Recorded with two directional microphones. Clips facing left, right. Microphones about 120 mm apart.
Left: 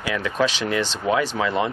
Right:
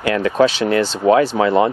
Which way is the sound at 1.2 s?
40° right (ahead or behind).